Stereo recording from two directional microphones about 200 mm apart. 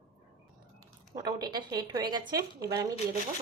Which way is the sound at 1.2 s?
20° right (ahead or behind).